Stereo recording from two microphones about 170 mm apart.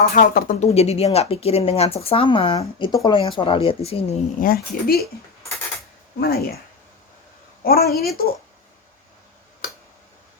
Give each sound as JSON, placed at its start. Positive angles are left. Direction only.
{"t": 0.0, "sound": "speech", "side_deg": 60}
{"t": 0.7, "sound": "speech", "side_deg": 40}
{"t": 4.4, "sound": "speech", "side_deg": 60}
{"t": 6.1, "sound": "speech", "side_deg": 65}
{"t": 7.6, "sound": "speech", "side_deg": 65}